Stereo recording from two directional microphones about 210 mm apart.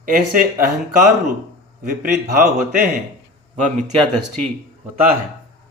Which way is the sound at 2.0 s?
40° right (ahead or behind).